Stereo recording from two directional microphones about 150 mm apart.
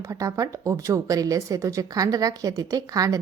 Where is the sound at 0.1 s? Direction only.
20° right (ahead or behind).